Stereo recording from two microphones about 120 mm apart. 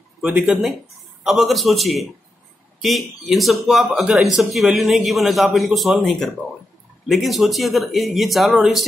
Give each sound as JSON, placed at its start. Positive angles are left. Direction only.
{"t": 0.2, "sound": "speech", "side_deg": -10}
{"t": 1.2, "sound": "speech", "side_deg": 0}